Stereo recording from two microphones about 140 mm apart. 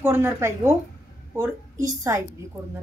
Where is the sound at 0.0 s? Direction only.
15° right (ahead or behind).